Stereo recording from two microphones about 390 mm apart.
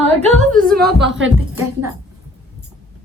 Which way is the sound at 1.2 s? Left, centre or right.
Right.